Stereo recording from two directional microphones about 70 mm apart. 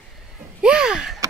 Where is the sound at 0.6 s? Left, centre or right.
Centre.